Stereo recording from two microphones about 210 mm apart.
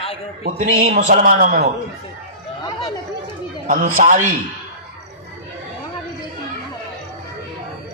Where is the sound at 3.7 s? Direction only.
35° right (ahead or behind).